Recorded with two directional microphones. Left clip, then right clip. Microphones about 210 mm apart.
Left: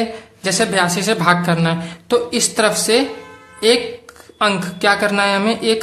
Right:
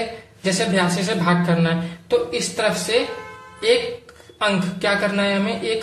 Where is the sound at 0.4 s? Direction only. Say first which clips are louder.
Left 4 dB; 35° left (ahead or behind).